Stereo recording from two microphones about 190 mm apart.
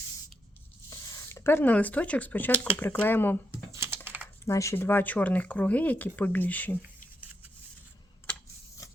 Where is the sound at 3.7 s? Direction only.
15° right (ahead or behind).